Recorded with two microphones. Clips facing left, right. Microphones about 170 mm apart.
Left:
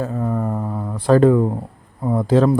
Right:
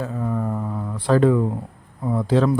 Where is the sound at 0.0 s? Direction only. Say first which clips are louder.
Left 3 dB; 45° left (ahead or behind).